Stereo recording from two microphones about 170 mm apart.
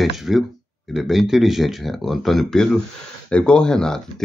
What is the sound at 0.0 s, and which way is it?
Speech, centre (ahead or behind).